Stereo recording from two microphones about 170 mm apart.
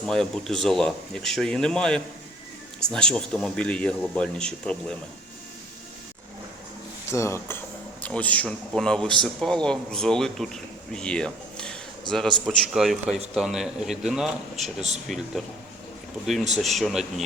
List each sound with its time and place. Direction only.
0.0 s a man's voice: centre (ahead or behind)
7.1 s a man's voice: 15° left (ahead or behind); by 14.3 s 5° right (ahead or behind)
14.8 s speech: 40° right (ahead or behind)
16.2 s a man's voice: centre (ahead or behind)